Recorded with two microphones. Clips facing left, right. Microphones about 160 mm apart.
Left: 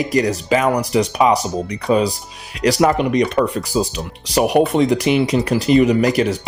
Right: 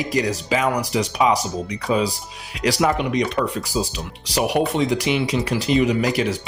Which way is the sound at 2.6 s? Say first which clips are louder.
Left 5 dB; 55° left (ahead or behind).